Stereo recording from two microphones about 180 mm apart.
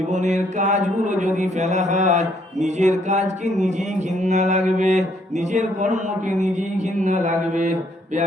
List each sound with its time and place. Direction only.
0.1 s mantra: 40° right (ahead or behind)